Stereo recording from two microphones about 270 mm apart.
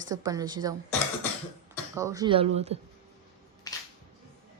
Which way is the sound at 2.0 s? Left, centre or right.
Centre.